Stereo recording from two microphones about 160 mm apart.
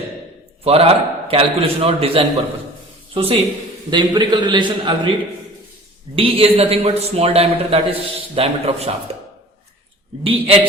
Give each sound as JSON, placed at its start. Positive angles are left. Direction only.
{"t": 0.6, "sound": "a man's voice", "side_deg": -40}
{"t": 6.1, "sound": "a man's voice", "side_deg": -35}
{"t": 10.2, "sound": "a man's voice", "side_deg": -35}